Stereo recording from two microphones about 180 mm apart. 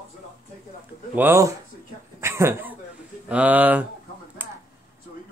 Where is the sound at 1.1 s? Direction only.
15° right (ahead or behind).